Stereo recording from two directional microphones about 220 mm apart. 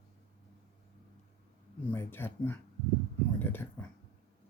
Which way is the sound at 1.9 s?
10° left (ahead or behind).